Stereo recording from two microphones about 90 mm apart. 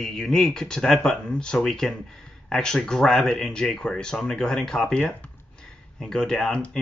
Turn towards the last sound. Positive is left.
turn(degrees=10)  # may be behind; listen again after turning